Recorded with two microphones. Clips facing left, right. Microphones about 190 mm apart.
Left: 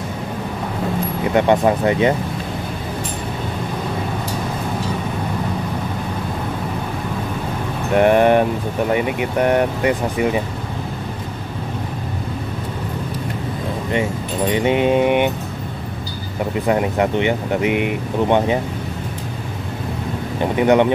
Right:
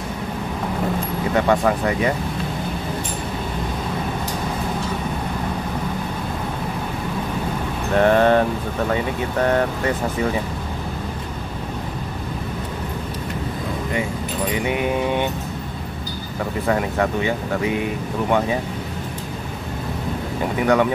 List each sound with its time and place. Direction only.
1.3 s speech: 20° left (ahead or behind)
7.9 s speech: 15° left (ahead or behind)
14.5 s speech: 25° left (ahead or behind)
16.6 s speech: 20° left (ahead or behind)
20.5 s speech: 20° left (ahead or behind)